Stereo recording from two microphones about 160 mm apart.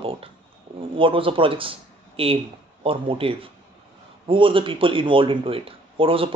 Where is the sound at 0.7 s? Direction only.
35° right (ahead or behind).